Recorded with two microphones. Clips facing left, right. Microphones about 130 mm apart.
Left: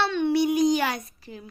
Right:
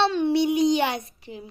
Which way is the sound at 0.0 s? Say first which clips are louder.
Right 2 dB; 30° right (ahead or behind).